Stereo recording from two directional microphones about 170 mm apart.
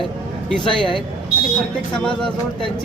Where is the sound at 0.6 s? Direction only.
30° left (ahead or behind).